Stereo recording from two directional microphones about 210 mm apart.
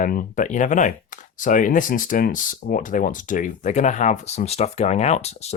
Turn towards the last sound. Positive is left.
turn(degrees=30)  # may be behind; listen again after turning